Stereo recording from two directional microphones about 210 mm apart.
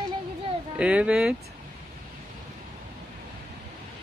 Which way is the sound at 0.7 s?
5° right (ahead or behind).